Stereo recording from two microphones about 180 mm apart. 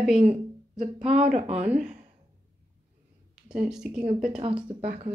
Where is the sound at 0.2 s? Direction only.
35° right (ahead or behind).